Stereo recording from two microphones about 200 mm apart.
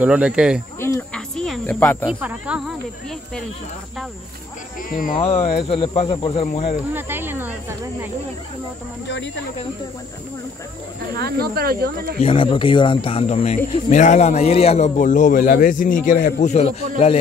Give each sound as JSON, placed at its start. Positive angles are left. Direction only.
{"t": 0.0, "sound": "speech", "side_deg": -5}
{"t": 0.7, "sound": "a sound", "side_deg": 10}
{"t": 2.0, "sound": "speech", "side_deg": -5}
{"t": 4.8, "sound": "speech", "side_deg": 45}
{"t": 5.2, "sound": "a man's voice", "side_deg": 30}
{"t": 6.9, "sound": "speech", "side_deg": -10}
{"t": 9.0, "sound": "speech", "side_deg": 60}
{"t": 11.1, "sound": "speech", "side_deg": -50}
{"t": 12.2, "sound": "a man's voice", "side_deg": 25}